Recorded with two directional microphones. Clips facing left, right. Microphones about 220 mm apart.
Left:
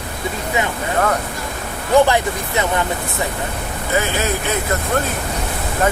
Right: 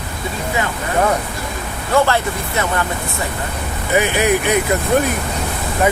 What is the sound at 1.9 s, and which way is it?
Speech, 15° left (ahead or behind).